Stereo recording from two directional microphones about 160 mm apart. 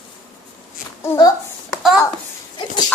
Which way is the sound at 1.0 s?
20° left (ahead or behind).